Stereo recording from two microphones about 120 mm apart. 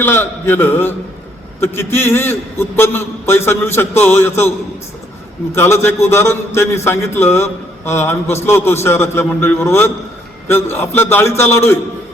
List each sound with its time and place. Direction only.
0.0 s a man's voice: 20° left (ahead or behind)